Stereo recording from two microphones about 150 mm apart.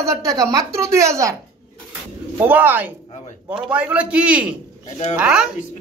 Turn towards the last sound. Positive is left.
turn(degrees=-5)  # may be behind; listen again after turning